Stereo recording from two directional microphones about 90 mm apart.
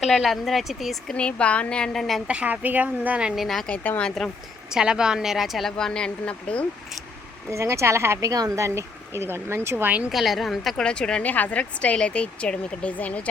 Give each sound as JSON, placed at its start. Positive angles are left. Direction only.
{"t": 0.0, "sound": "a woman's voice", "side_deg": 0}
{"t": 1.1, "sound": "speech", "side_deg": 15}
{"t": 2.2, "sound": "speech", "side_deg": -15}
{"t": 3.7, "sound": "speech", "side_deg": 15}
{"t": 4.7, "sound": "a woman's voice", "side_deg": -5}
{"t": 7.5, "sound": "a woman's voice", "side_deg": -30}
{"t": 10.1, "sound": "a woman's voice", "side_deg": 0}